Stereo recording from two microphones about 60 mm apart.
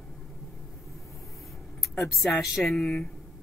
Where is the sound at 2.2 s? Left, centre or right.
Centre.